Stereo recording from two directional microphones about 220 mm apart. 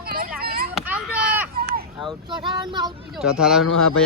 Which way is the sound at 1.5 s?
45° right (ahead or behind).